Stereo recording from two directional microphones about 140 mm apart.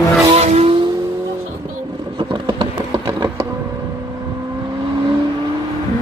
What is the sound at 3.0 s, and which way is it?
Music, 25° right (ahead or behind).